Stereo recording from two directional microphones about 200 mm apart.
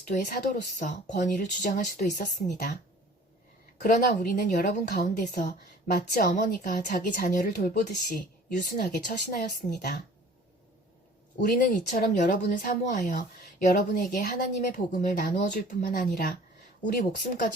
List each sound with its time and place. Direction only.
0.1 s a woman's voice: 45° left (ahead or behind)
3.8 s a woman's voice: 40° left (ahead or behind)
11.4 s a woman's voice: 40° left (ahead or behind)